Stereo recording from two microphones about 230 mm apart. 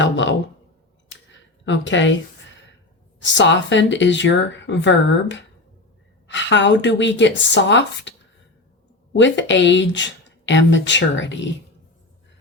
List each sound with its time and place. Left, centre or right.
0.0 s a sound: left
3.2 s speech: left
9.1 s speech: left